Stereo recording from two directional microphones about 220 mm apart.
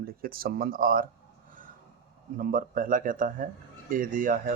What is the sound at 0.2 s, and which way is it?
Speech, 40° right (ahead or behind).